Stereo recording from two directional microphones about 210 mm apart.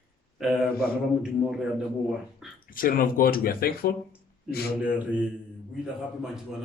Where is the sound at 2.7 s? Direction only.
40° left (ahead or behind).